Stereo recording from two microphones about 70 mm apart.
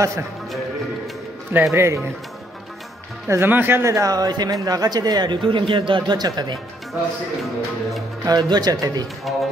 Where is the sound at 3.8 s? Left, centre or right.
Right.